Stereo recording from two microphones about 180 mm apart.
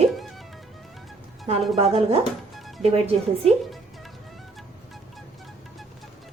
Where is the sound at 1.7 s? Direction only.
35° right (ahead or behind).